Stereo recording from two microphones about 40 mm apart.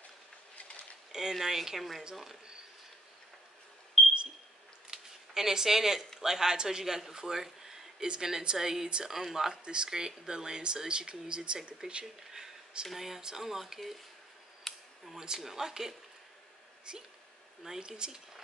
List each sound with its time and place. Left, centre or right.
1.4 s speech: centre
1.8 s speech: centre
4.0 s a sound: centre
6.2 s speech: centre
7.2 s a sound: centre
8.1 s speech: centre
9.5 s speech: right
12.8 s speech: centre
14.7 s camera: centre
15.1 s speech: centre
16.9 s speech: right